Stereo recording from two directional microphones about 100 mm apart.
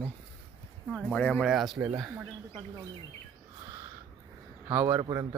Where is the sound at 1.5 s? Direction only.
Centre (ahead or behind).